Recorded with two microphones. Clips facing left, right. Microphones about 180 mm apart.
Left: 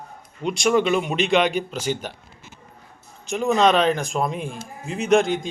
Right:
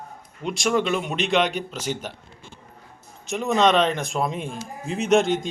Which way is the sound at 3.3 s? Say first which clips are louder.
Left 1 dB; centre (ahead or behind).